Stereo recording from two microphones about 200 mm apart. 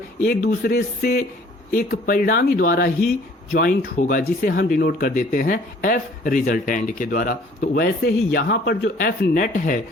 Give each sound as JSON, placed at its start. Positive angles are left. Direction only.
{"t": 0.2, "sound": "speech", "side_deg": 45}